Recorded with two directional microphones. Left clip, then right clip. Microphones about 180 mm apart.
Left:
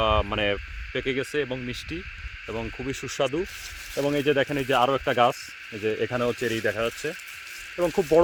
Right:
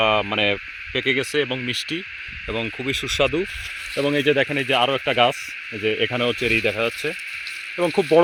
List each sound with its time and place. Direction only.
0.0 s speech: 40° right (ahead or behind)
4.5 s speech: 20° right (ahead or behind)
5.8 s speech: 50° right (ahead or behind)